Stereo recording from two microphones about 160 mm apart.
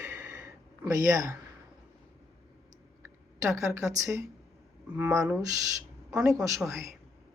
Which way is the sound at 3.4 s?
20° right (ahead or behind).